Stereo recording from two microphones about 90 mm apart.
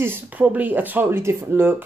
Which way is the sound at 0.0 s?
20° right (ahead or behind).